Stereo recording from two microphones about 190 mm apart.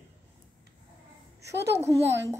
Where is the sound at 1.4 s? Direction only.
60° right (ahead or behind).